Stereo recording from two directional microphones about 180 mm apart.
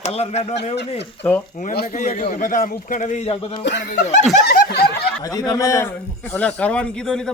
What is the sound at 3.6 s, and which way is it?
Speech, 70° left (ahead or behind).